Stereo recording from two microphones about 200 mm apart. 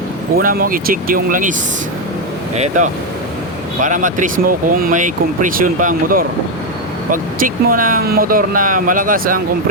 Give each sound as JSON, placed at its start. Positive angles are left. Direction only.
{"t": 0.3, "sound": "speech", "side_deg": -45}
{"t": 2.6, "sound": "speech", "side_deg": -40}